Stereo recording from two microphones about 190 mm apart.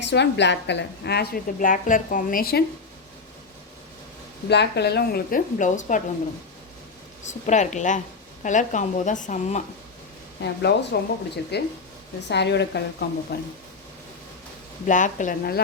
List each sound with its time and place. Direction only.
0.0 s a woman's voice: 65° left (ahead or behind)
4.4 s a woman's voice: 60° left (ahead or behind); by 6.0 s 40° left (ahead or behind)
7.3 s a woman's voice: 40° left (ahead or behind)
10.4 s a woman's voice: 65° left (ahead or behind)
14.8 s a woman's voice: 40° left (ahead or behind)